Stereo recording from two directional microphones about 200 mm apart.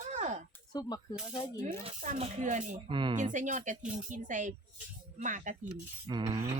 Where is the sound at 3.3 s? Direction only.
40° right (ahead or behind).